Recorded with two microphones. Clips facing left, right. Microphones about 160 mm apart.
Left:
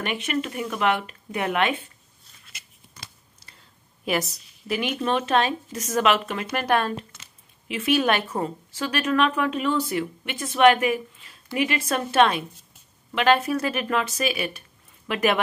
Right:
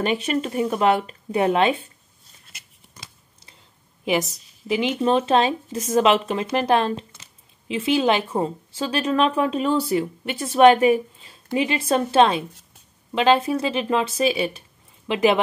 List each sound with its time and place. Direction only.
0.0 s speech: 30° right (ahead or behind)
4.0 s a woman's voice: 20° right (ahead or behind)